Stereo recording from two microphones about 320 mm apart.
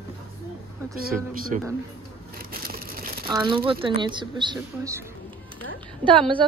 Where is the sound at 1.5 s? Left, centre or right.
Right.